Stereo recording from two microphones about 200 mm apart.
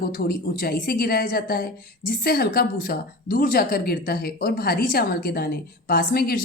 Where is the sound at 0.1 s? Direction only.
45° left (ahead or behind).